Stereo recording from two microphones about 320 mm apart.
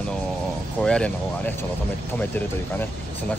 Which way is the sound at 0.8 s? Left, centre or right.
Centre.